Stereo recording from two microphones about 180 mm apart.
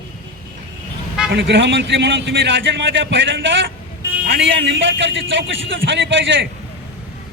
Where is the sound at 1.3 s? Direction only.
75° right (ahead or behind); by 6.4 s 90° right.